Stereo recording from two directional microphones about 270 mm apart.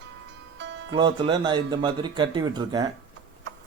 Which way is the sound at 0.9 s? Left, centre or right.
Centre.